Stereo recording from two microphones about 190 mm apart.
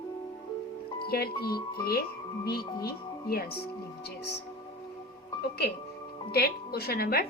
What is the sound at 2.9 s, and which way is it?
Speech, 55° left (ahead or behind).